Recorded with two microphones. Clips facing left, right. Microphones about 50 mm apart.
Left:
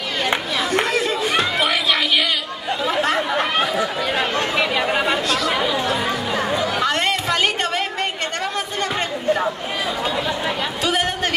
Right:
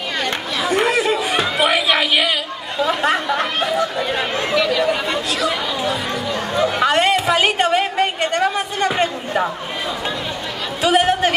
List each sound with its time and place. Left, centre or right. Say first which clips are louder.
0.7 s a sound: right 4 dB; centre
2.8 s chatter: right 3 dB; centre
4.6 s chatter: right 5 dB; left
4.8 s chatter: even; centre
6.8 s a sound: right 4 dB; centre
10.8 s chatter: right 8 dB; centre